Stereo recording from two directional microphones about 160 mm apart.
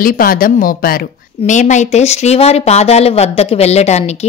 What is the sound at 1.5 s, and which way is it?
Speech, 50° left (ahead or behind).